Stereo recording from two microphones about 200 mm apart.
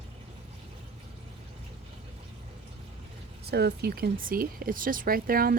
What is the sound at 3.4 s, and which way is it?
Speech, 55° right (ahead or behind).